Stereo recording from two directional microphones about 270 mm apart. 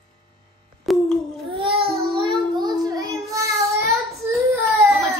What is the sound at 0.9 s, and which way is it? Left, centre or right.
Babbling, centre.